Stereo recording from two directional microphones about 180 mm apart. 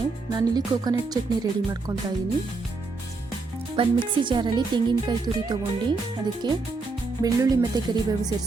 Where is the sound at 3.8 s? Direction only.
30° right (ahead or behind).